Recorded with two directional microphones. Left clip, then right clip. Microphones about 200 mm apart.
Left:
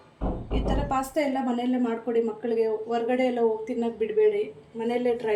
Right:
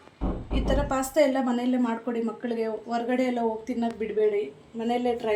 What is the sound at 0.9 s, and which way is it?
A woman's voice, 25° right (ahead or behind).